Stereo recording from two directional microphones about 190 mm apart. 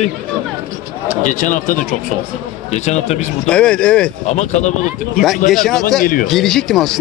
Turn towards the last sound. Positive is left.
turn(degrees=0)  # may be behind; listen again after turning